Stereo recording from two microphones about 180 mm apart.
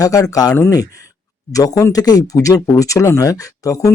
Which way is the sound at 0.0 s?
20° left (ahead or behind).